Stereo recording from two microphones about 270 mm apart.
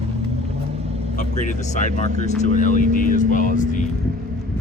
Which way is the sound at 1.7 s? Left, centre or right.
Left.